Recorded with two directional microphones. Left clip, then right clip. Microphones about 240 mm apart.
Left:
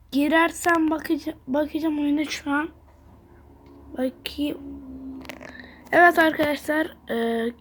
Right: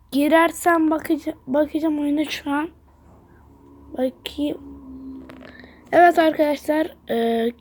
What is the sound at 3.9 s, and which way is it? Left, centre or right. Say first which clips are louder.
A woman's voice: right 3 dB; centre.